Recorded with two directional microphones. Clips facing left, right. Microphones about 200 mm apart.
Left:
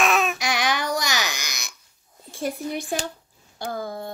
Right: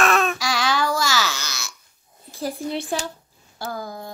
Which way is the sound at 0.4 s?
20° left (ahead or behind).